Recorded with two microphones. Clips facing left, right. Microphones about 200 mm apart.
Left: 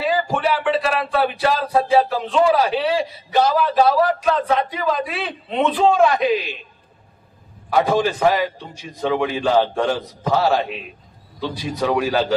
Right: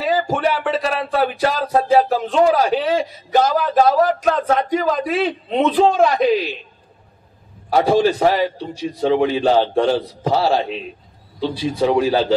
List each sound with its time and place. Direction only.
0.0 s speech: 40° right (ahead or behind)
7.7 s a man's voice: 35° right (ahead or behind)